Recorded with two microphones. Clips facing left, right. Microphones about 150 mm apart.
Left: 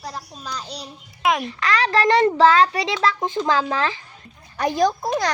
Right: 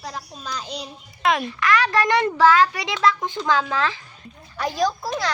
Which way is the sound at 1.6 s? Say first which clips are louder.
Even; 35° left (ahead or behind).